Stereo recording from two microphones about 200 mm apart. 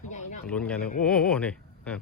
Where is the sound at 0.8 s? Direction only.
45° left (ahead or behind).